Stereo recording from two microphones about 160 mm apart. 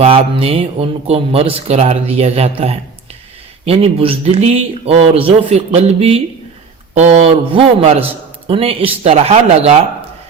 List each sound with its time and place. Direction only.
0.0 s speech: 35° right (ahead or behind)